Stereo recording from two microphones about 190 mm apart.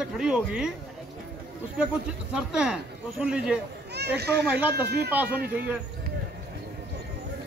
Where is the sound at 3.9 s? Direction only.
60° right (ahead or behind).